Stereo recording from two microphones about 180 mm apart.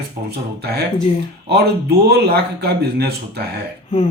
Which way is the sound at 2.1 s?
60° right (ahead or behind).